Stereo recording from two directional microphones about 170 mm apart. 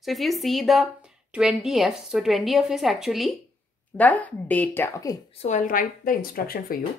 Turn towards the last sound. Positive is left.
turn(degrees=55)  # may be behind; listen again after turning